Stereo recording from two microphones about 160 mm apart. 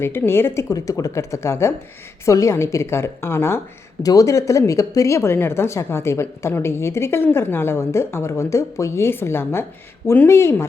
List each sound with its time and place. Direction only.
0.0 s speech: 15° left (ahead or behind)